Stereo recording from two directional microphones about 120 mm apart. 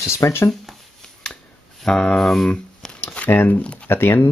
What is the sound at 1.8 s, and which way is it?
Speech, 5° left (ahead or behind).